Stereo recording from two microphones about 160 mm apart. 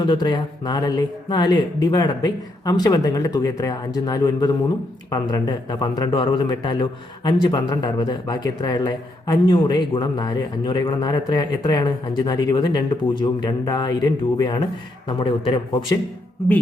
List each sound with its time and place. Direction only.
0.0 s a man's voice: 30° left (ahead or behind)